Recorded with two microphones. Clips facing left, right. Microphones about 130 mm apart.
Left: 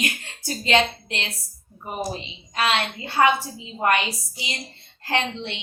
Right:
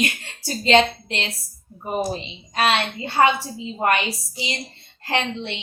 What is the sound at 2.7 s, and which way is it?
A woman's voice, 25° right (ahead or behind).